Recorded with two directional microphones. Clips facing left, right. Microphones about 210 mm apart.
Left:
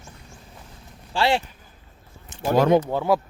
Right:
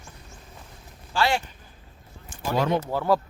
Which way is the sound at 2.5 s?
45° left (ahead or behind).